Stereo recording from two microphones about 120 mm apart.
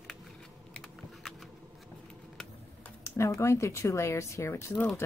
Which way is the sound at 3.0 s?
25° left (ahead or behind).